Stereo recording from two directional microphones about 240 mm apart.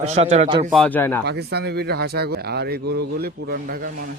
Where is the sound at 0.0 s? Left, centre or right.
Right.